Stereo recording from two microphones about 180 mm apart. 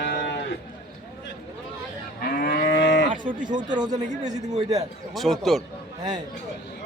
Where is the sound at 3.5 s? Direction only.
25° right (ahead or behind).